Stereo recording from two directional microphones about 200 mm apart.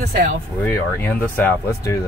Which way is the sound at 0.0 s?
50° right (ahead or behind).